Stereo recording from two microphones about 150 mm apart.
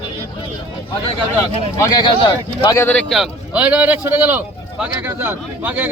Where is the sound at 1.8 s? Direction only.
30° left (ahead or behind).